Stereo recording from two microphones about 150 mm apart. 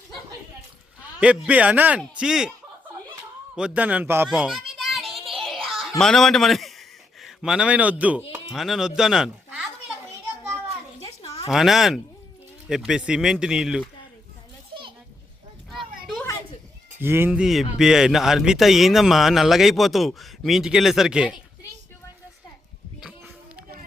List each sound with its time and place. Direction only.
1.2 s a man's voice: 10° right (ahead or behind)
3.5 s a man's voice: 10° right (ahead or behind)
4.3 s a sound: 5° right (ahead or behind)
6.0 s a man's voice: 5° left (ahead or behind)
11.0 s a sound: 40° left (ahead or behind)
11.4 s a man's voice: centre (ahead or behind)
17.0 s a man's voice: 15° right (ahead or behind)